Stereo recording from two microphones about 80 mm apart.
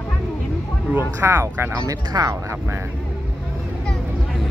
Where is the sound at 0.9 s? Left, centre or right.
Right.